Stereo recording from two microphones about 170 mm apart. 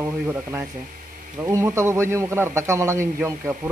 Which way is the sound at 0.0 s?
15° right (ahead or behind).